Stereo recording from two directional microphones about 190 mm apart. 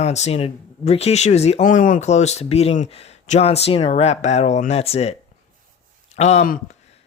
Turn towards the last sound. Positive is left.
turn(degrees=40)  # may be behind; listen again after turning